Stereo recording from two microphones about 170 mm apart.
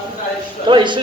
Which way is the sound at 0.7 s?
30° right (ahead or behind).